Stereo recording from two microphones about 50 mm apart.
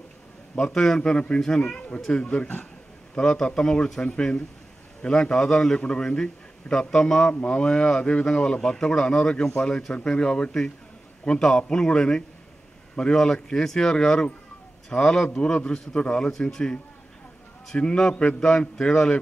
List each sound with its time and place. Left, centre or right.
0.6 s a man's voice: centre
16.3 s a man's voice: centre